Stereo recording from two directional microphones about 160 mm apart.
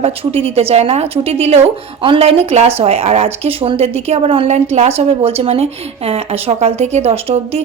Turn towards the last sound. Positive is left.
turn(degrees=-40)  # may be behind; listen again after turning